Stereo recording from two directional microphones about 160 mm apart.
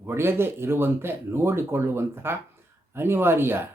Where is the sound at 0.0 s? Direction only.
15° right (ahead or behind).